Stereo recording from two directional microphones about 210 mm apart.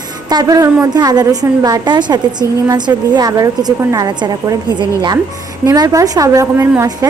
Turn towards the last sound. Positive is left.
turn(degrees=-15)  # may be behind; listen again after turning